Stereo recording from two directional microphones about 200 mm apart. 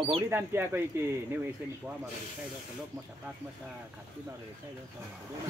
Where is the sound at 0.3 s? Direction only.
10° right (ahead or behind).